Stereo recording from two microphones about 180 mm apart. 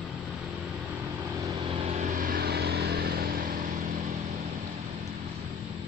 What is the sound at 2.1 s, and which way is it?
Vehicle, 50° right (ahead or behind).